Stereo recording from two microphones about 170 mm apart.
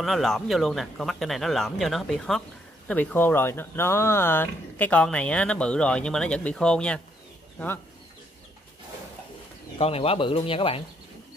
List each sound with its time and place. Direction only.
0.0 s speech: centre (ahead or behind)
9.8 s speech: 35° left (ahead or behind)